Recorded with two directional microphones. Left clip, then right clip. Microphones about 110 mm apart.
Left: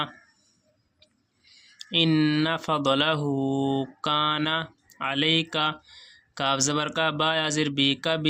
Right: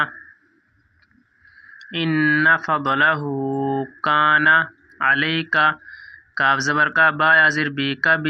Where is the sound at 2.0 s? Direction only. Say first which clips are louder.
Right 4 dB; 40° left (ahead or behind).